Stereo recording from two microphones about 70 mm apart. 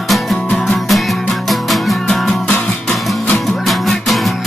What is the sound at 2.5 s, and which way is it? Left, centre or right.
Music, centre.